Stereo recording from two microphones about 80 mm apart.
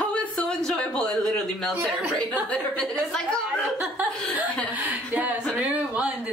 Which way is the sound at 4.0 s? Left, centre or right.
Centre.